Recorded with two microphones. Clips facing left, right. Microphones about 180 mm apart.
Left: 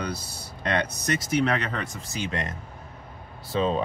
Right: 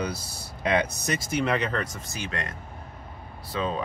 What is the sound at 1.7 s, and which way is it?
Speech, 15° left (ahead or behind).